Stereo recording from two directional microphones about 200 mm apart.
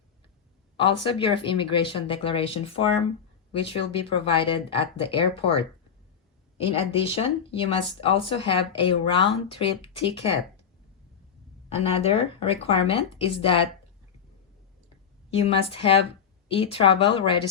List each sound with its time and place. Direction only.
0.9 s speech: 25° left (ahead or behind)
6.6 s speech: 30° left (ahead or behind)
11.7 s speech: 30° left (ahead or behind)
15.4 s speech: 30° left (ahead or behind)